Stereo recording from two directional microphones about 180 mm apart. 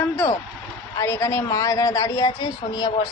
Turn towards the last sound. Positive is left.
turn(degrees=25)  # may be behind; listen again after turning